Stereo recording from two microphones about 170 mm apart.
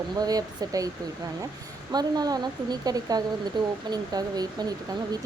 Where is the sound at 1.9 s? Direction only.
25° right (ahead or behind).